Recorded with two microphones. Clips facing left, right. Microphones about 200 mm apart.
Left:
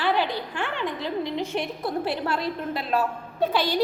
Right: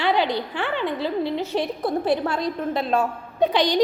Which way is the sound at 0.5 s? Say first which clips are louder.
Right 4 dB; 60° right (ahead or behind).